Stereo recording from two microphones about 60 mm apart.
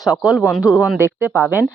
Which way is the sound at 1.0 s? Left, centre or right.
Right.